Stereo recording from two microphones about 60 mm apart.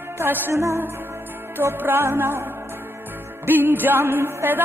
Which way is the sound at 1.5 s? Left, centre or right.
Right.